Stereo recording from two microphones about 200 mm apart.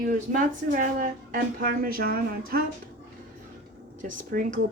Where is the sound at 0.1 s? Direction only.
40° right (ahead or behind).